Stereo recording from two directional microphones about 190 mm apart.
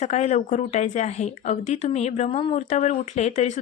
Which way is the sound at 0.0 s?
35° left (ahead or behind).